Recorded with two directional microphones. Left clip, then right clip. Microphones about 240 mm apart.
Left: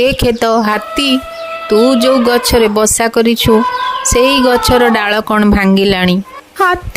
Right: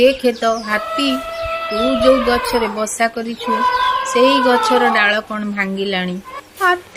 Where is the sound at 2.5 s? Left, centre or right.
Left.